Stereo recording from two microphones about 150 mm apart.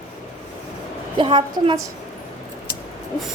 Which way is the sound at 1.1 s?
35° right (ahead or behind).